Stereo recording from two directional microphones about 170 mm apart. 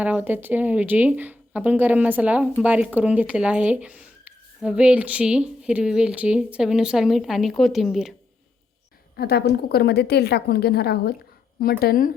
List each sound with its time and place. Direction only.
0.0 s speech: 10° right (ahead or behind)
9.1 s a woman's voice: 70° left (ahead or behind)